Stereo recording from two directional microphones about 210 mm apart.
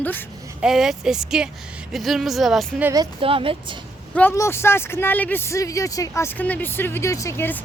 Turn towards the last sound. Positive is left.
turn(degrees=10)  # may be behind; listen again after turning